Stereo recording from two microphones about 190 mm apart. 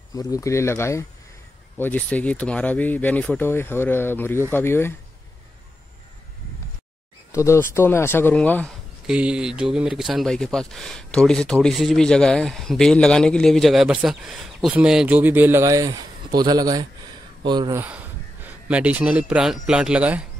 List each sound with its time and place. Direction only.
0.1 s speech: 20° left (ahead or behind)
7.3 s speech: 15° left (ahead or behind)
9.0 s speech: 5° right (ahead or behind); by 17.8 s 20° right (ahead or behind)
17.8 s speech: 10° right (ahead or behind)